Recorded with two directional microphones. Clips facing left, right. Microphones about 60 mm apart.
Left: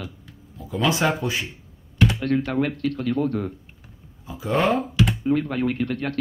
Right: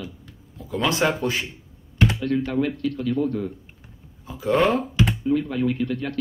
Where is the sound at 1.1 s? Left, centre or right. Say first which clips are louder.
Right 1 dB; centre.